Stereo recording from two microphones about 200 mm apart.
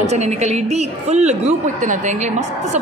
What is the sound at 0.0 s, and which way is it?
A woman's voice, 35° right (ahead or behind).